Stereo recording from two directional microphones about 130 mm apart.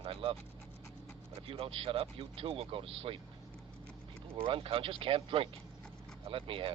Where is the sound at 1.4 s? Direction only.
45° right (ahead or behind).